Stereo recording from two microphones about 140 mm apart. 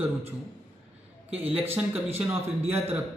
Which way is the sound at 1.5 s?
15° right (ahead or behind).